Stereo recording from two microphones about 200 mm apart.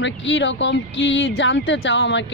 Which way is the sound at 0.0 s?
65° left (ahead or behind).